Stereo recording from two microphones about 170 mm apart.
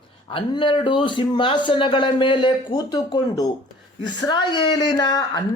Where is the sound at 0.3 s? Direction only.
30° left (ahead or behind).